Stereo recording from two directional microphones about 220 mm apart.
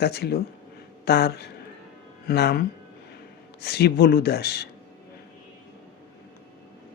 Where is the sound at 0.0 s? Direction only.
45° left (ahead or behind).